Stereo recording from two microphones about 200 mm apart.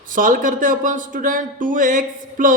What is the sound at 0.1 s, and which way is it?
A man's voice, 45° right (ahead or behind).